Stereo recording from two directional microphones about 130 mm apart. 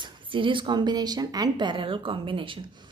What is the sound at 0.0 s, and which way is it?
Speech, 40° right (ahead or behind).